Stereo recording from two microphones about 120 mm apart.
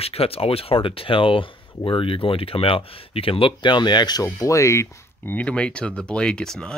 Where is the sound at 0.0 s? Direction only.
55° left (ahead or behind).